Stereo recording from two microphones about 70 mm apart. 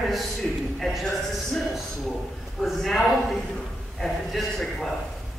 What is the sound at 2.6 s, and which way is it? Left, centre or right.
Speech, centre.